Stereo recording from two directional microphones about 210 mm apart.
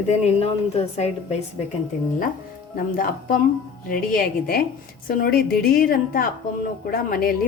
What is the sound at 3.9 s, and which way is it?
A woman's voice, 40° left (ahead or behind).